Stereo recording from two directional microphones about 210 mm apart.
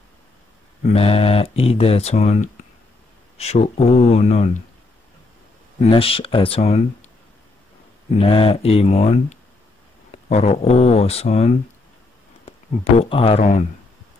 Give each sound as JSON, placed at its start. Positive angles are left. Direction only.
{"t": 0.9, "sound": "speech", "side_deg": 30}
{"t": 5.8, "sound": "speech", "side_deg": 25}
{"t": 8.2, "sound": "speech", "side_deg": 25}